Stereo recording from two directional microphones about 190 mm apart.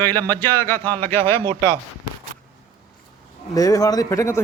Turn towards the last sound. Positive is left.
turn(degrees=15)  # may be behind; listen again after turning